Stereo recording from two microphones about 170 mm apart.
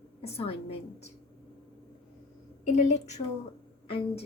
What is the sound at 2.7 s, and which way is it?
A woman's voice, 45° left (ahead or behind).